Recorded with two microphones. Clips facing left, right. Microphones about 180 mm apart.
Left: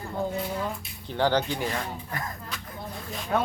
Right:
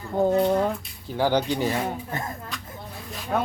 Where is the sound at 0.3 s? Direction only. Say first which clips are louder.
Right 11 dB; 60° right (ahead or behind).